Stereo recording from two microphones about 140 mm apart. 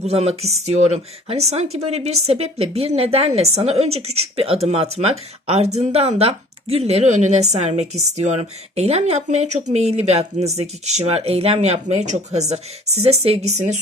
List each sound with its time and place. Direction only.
0.0 s speech: 50° right (ahead or behind)